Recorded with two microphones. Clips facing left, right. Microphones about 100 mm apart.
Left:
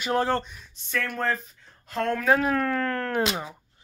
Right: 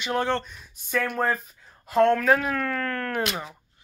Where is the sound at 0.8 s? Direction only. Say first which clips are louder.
Right 3 dB; 15° right (ahead or behind).